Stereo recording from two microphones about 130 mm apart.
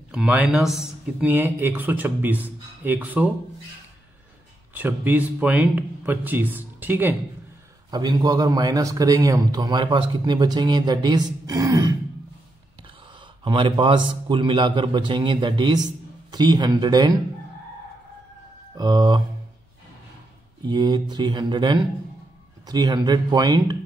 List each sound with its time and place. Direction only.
0.1 s a man's voice: 10° right (ahead or behind)
1.2 s speech: 15° right (ahead or behind)
4.7 s speech: 15° right (ahead or behind)
7.9 s a man's voice: 35° right (ahead or behind)
11.4 s throat clearing: 30° right (ahead or behind)
13.4 s a man's voice: 40° right (ahead or behind)
18.8 s a man's voice: 30° right (ahead or behind)
20.6 s a man's voice: 35° right (ahead or behind)